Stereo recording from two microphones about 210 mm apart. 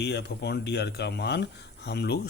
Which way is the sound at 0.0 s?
55° left (ahead or behind).